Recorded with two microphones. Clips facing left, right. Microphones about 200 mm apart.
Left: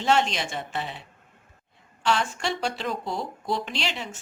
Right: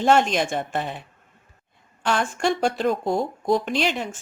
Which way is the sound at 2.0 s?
50° right (ahead or behind).